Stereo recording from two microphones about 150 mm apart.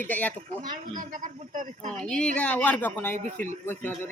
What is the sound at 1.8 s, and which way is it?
Speech, 5° left (ahead or behind).